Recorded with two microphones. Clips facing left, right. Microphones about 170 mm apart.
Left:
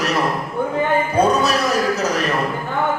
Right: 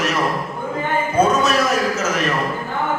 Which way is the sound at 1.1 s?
35° left (ahead or behind).